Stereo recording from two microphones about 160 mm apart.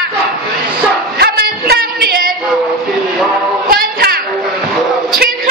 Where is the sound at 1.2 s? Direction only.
80° right.